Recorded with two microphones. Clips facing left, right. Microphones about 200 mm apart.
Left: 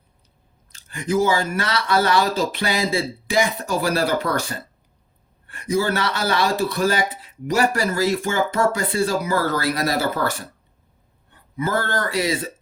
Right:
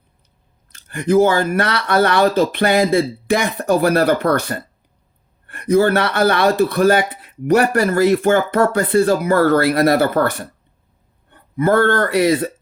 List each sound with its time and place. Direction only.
0.7 s speech: 60° right (ahead or behind)